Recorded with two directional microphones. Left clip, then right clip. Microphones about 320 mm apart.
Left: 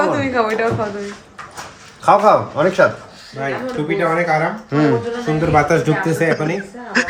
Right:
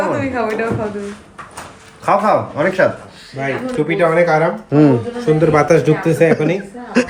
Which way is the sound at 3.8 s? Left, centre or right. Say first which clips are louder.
Right 4 dB; centre.